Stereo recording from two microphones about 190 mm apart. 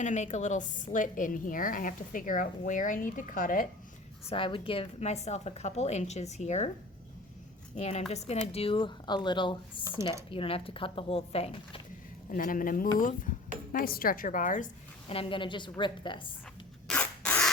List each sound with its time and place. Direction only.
0.0 s a woman's voice: 40° left (ahead or behind)
4.3 s a woman's voice: 25° left (ahead or behind)
7.8 s a woman's voice: 35° left (ahead or behind)
12.3 s a woman's voice: 45° left (ahead or behind)
15.1 s speech: 30° left (ahead or behind)
16.9 s rub: 5° left (ahead or behind)